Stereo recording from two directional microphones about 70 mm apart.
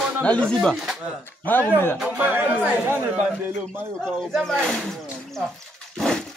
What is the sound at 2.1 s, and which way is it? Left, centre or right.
Speech, right.